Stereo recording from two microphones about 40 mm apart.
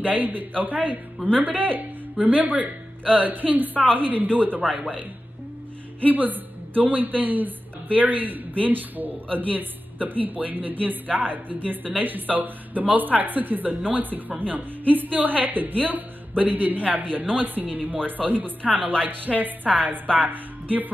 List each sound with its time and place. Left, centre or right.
0.0 s a woman's voice: right
6.0 s a woman's voice: right